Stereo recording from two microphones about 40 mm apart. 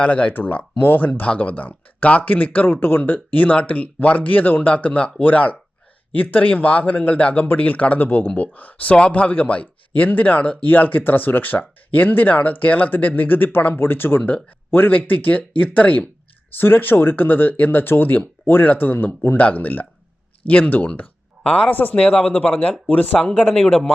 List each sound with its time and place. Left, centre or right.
0.0 s speech: left
0.8 s speech: left
4.7 s speech: left
7.2 s speech: left
7.5 s speech: left
16.6 s speech: left
18.4 s speech: left
21.4 s speech: left
21.7 s speech: left
22.2 s speech: left
23.5 s a man's voice: centre